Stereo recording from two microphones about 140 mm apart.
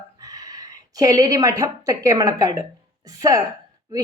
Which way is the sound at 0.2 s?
25° right (ahead or behind).